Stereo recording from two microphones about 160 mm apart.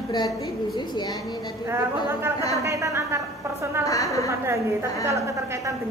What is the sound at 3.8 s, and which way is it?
Speech, 20° left (ahead or behind).